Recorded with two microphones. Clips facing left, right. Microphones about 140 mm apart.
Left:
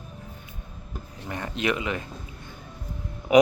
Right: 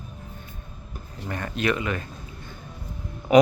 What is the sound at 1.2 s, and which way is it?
Speech, 20° left (ahead or behind).